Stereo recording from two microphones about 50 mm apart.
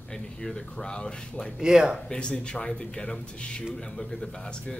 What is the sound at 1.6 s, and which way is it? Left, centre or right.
Speech, centre.